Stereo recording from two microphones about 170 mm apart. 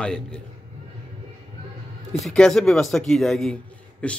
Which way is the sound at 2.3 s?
5° left (ahead or behind).